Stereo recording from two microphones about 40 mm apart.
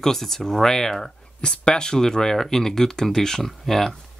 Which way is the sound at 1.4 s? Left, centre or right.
Left.